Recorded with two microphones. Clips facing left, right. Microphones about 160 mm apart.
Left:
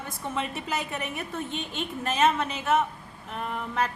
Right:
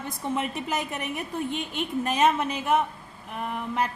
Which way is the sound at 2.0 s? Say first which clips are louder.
Right 1 dB; 15° right (ahead or behind).